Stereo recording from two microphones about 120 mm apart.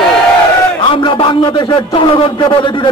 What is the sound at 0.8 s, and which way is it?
A man's voice, 45° left (ahead or behind).